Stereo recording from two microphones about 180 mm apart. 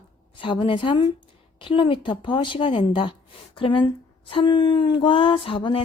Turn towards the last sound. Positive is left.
turn(degrees=30)  # may be behind; listen again after turning